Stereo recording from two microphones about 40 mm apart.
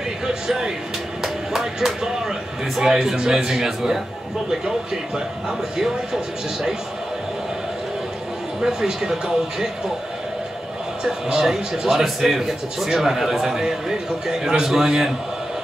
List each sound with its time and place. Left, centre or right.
0.3 s a man's voice: centre
8.5 s a man's voice: centre
11.1 s a man's voice: centre